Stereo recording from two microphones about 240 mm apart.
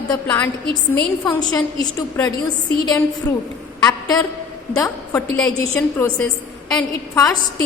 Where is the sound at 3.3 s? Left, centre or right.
Centre.